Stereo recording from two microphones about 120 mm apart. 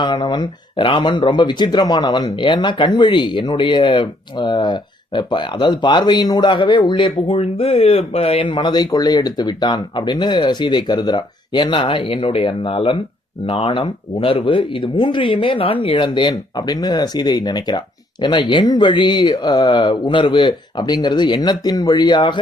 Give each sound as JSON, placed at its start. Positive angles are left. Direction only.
{"t": 0.0, "sound": "speech", "side_deg": 40}